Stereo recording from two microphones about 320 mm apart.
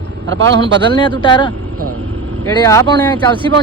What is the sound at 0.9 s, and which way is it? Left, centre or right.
Speech, centre.